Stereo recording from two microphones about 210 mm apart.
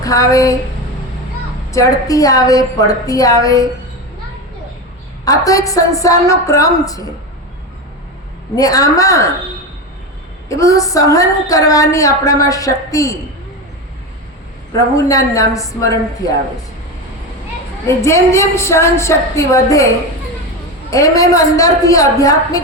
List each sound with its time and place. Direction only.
0.0 s a woman's voice: 15° left (ahead or behind)
1.7 s a woman's voice: 15° left (ahead or behind)
5.5 s a woman's voice: 15° left (ahead or behind)
8.5 s a woman's voice: 15° left (ahead or behind)
10.5 s a woman's voice: 15° left (ahead or behind)
14.7 s a woman's voice: 15° left (ahead or behind)
17.8 s a woman's voice: 15° left (ahead or behind)
20.9 s a woman's voice: 15° left (ahead or behind)